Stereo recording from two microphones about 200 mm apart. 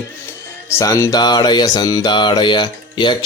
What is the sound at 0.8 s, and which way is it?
Music, 15° left (ahead or behind).